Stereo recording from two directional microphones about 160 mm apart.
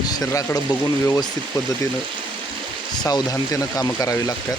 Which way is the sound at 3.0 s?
20° left (ahead or behind).